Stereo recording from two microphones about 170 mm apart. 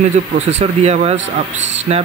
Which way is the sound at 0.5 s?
40° right (ahead or behind).